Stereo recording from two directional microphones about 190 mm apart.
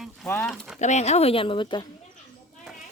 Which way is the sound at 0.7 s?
40° left (ahead or behind).